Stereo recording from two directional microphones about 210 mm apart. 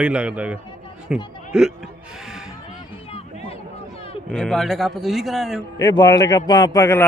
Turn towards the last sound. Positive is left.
turn(degrees=15)  # may be behind; listen again after turning